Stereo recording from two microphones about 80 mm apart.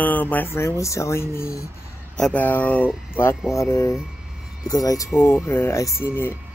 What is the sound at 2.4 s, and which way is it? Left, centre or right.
Speech, left.